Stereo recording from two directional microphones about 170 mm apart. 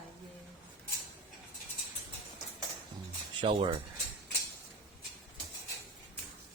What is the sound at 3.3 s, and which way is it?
Speech, 30° right (ahead or behind).